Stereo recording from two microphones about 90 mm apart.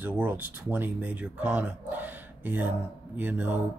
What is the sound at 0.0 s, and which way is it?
Speech, 20° right (ahead or behind).